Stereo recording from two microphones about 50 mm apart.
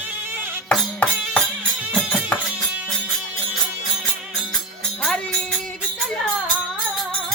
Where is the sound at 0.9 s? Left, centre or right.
Left.